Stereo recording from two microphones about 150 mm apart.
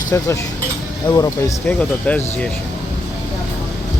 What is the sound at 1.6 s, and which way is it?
Speech, 10° left (ahead or behind).